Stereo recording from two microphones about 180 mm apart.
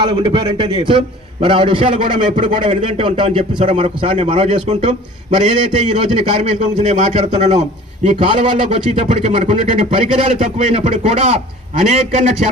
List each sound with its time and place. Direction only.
0.0 s a man's voice: 25° right (ahead or behind)
8.0 s speech: 30° right (ahead or behind)